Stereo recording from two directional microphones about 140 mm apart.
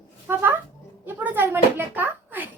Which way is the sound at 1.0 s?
15° right (ahead or behind).